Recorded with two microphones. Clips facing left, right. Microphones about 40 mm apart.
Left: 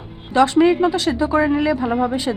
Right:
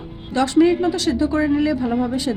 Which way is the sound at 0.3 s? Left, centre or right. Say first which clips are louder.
Left 2 dB; centre.